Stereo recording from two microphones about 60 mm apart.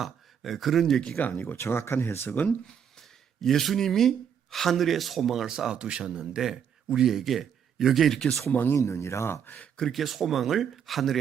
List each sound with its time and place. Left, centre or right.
0.0 s speech: centre
1.4 s speech: left
3.4 s speech: centre
8.4 s speech: left
8.7 s speech: left
9.7 s speech: centre
10.0 s speech: centre